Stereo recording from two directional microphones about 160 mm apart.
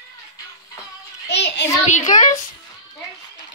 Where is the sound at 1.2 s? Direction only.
90° left.